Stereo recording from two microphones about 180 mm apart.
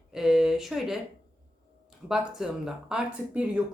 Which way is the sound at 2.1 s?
5° right (ahead or behind).